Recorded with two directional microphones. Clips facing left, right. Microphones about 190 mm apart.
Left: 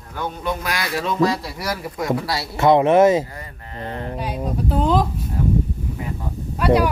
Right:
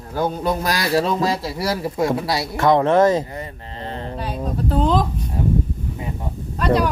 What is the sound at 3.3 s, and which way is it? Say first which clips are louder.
Mantra: right 4 dB; 25° right (ahead or behind).